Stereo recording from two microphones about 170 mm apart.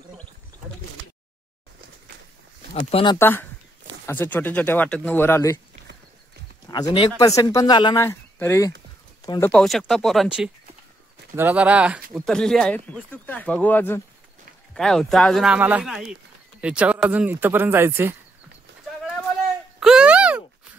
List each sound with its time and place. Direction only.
2.7 s speech: 35° left (ahead or behind)
3.2 s speech: 15° left (ahead or behind)
6.7 s speech: 25° left (ahead or behind)
9.5 s speech: centre (ahead or behind)
12.3 s speech: 5° left (ahead or behind); by 18.1 s 15° right (ahead or behind)
19.8 s a sound: 5° right (ahead or behind)